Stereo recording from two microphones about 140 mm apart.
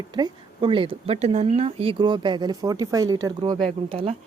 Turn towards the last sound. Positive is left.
turn(degrees=-40)  # may be behind; listen again after turning